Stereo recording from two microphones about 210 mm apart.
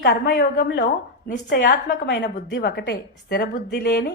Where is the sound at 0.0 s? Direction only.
50° left (ahead or behind).